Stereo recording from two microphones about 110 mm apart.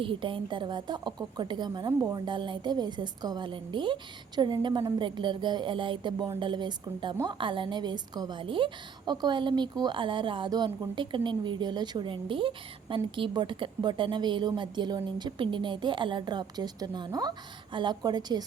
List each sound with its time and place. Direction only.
0.0 s speech: 50° right (ahead or behind)